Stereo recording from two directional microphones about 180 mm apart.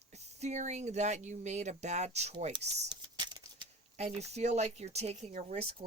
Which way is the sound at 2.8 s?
25° right (ahead or behind).